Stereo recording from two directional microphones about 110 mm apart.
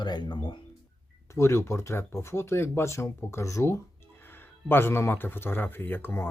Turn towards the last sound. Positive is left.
turn(degrees=20)  # may be behind; listen again after turning